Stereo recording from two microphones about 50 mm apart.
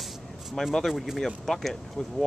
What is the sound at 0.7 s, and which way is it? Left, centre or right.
Speech, centre.